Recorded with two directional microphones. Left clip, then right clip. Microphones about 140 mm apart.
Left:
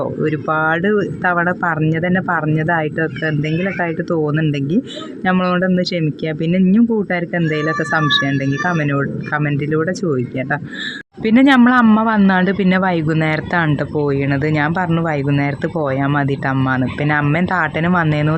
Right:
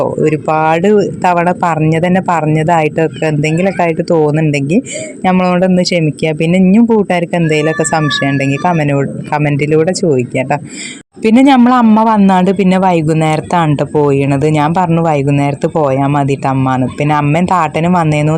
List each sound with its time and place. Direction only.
0.0 s speech: 35° right (ahead or behind)